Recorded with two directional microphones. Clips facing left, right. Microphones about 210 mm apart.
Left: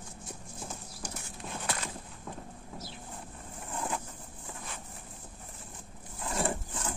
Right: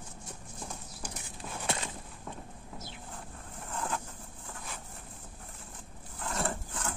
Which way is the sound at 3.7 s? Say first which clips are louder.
Even; 10° left (ahead or behind).